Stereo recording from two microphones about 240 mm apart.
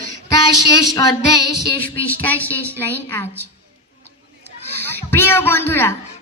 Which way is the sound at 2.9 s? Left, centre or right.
Centre.